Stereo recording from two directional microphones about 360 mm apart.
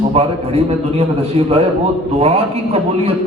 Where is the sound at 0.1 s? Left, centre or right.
Centre.